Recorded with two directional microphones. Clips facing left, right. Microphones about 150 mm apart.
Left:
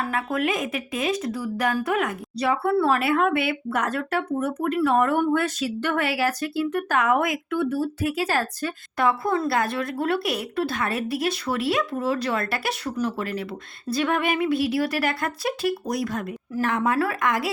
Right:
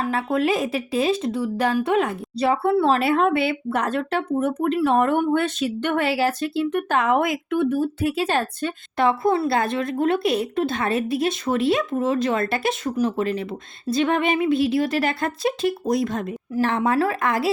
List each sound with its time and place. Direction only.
0.1 s speech: 30° right (ahead or behind)